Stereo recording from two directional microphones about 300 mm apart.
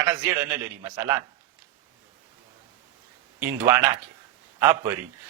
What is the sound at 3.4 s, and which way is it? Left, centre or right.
A man's voice, centre.